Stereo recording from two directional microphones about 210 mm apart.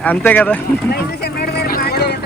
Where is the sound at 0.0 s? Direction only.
10° left (ahead or behind).